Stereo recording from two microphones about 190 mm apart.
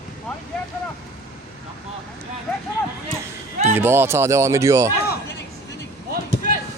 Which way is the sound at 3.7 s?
10° right (ahead or behind).